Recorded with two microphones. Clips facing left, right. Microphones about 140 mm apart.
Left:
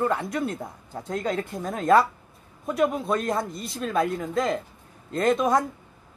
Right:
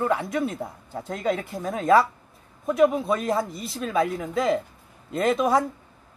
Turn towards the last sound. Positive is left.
turn(degrees=-5)  # may be behind; listen again after turning